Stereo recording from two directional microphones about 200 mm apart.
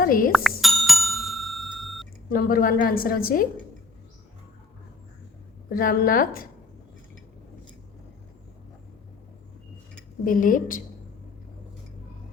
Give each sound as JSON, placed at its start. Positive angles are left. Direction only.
{"t": 0.0, "sound": "a woman's voice", "side_deg": 45}
{"t": 0.3, "sound": "speech", "side_deg": 0}
{"t": 0.6, "sound": "bicycle bell", "side_deg": 0}
{"t": 2.3, "sound": "a woman's voice", "side_deg": 45}
{"t": 5.6, "sound": "a woman's voice", "side_deg": 45}
{"t": 10.2, "sound": "a woman's voice", "side_deg": 40}